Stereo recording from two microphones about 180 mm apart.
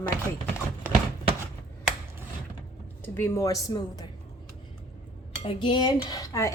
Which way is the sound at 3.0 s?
15° left (ahead or behind).